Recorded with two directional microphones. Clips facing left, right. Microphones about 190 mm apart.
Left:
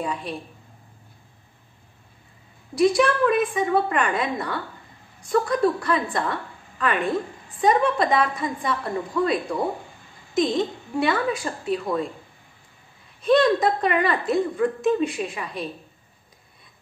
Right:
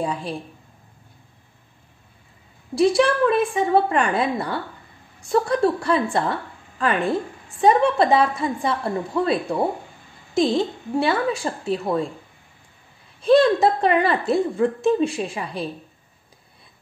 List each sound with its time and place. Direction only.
0.0 s a woman's voice: 30° right (ahead or behind)
2.7 s a woman's voice: 30° right (ahead or behind)
13.2 s a woman's voice: 30° right (ahead or behind)